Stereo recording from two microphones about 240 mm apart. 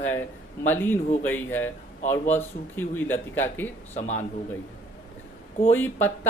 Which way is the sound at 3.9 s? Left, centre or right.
Left.